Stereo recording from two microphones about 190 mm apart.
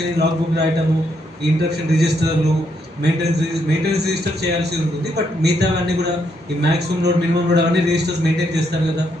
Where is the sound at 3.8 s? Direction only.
60° right (ahead or behind).